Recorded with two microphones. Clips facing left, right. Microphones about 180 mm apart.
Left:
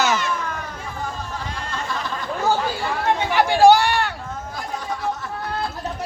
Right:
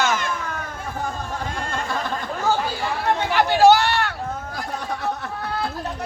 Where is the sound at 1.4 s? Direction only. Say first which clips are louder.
Right 2 dB; 50° right (ahead or behind).